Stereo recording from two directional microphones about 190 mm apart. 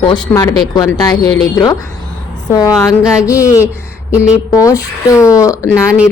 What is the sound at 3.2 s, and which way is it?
Speech, 15° left (ahead or behind).